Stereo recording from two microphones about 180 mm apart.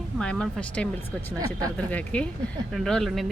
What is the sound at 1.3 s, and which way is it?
Speech, 20° right (ahead or behind).